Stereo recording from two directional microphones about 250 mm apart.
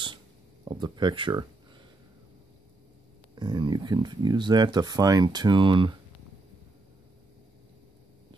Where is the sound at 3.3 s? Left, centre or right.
Centre.